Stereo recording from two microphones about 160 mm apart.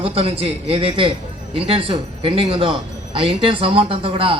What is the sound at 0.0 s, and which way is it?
A man's voice, 35° right (ahead or behind).